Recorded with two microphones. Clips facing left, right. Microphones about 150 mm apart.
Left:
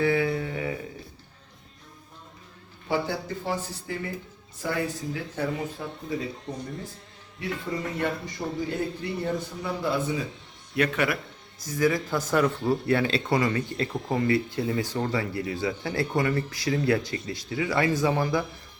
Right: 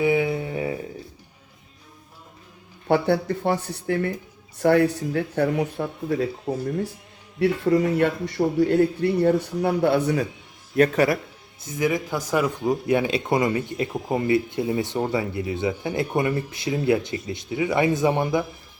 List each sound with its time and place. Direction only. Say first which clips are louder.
0.0 s a sound: right 3 dB; 20° right (ahead or behind)
2.8 s speech: right 8 dB; 60° right (ahead or behind)
7.3 s a man's voice: right 12 dB; 70° right (ahead or behind)
10.8 s speech: right 7 dB; 40° right (ahead or behind)
11.6 s speech: right 1 dB; 20° right (ahead or behind)